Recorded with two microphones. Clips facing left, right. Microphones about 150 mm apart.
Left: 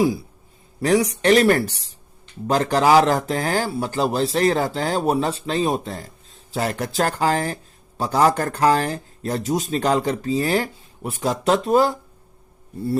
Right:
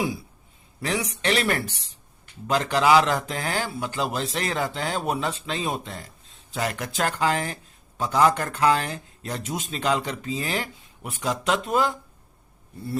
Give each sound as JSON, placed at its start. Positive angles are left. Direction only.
{"t": 0.8, "sound": "speech", "side_deg": 40}